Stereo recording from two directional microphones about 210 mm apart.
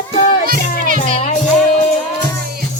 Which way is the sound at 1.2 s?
35° left (ahead or behind).